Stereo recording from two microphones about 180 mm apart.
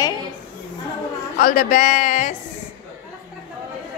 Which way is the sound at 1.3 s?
50° left (ahead or behind).